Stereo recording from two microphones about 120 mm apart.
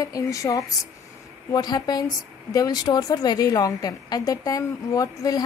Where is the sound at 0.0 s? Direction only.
30° left (ahead or behind).